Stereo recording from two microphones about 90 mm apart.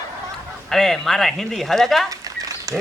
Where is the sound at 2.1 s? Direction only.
40° right (ahead or behind).